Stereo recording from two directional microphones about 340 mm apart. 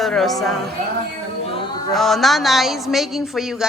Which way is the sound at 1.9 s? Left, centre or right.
Centre.